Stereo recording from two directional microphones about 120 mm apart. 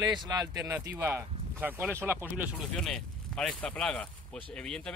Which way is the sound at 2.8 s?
5° left (ahead or behind).